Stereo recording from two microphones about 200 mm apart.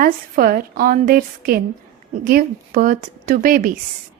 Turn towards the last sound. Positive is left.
turn(degrees=-45)  # may be behind; listen again after turning